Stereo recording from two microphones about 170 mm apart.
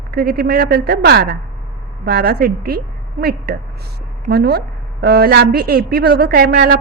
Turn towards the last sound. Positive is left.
turn(degrees=-70)  # may be behind; listen again after turning